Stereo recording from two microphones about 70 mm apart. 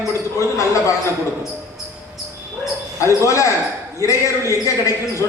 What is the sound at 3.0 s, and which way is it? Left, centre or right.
Speech, left.